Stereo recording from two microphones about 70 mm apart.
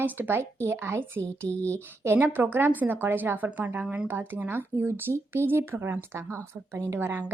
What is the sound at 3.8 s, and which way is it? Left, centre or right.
Speech, centre.